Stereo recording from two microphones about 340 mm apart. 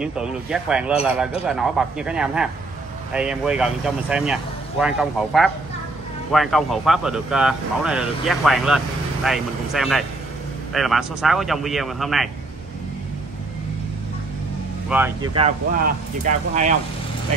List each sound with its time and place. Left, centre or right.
0.0 s speech: centre
14.9 s speech: centre; by 16.7 s right